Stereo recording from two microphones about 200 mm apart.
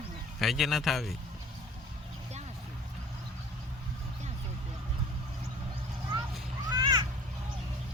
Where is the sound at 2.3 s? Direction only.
35° right (ahead or behind).